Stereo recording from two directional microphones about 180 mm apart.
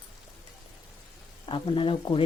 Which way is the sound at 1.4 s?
30° left (ahead or behind).